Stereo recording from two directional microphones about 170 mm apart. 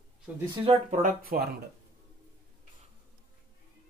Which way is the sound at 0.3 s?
10° right (ahead or behind).